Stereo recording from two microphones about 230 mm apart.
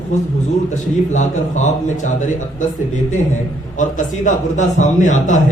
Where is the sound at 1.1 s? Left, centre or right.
Left.